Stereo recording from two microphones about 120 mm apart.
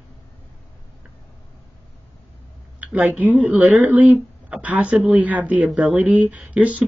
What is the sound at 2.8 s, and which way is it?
Speech, 10° right (ahead or behind).